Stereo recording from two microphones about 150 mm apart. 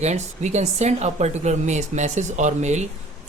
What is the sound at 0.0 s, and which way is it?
Speech, 50° right (ahead or behind).